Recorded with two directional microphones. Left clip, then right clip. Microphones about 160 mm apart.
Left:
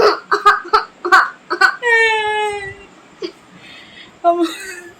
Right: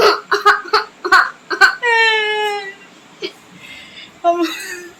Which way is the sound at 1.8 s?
10° left (ahead or behind).